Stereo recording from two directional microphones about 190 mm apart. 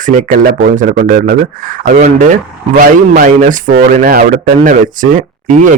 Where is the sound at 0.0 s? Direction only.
45° right (ahead or behind).